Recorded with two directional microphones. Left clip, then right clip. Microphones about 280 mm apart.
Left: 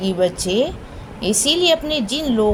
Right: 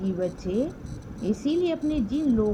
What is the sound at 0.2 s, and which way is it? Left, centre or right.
Speech, right.